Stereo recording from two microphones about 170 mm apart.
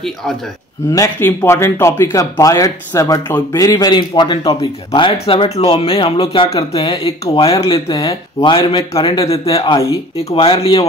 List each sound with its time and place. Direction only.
0.0 s a man's voice: centre (ahead or behind)
0.9 s speech: 15° left (ahead or behind); by 10.9 s 35° left (ahead or behind)